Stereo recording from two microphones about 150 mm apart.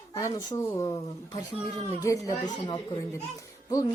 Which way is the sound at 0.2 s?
20° left (ahead or behind).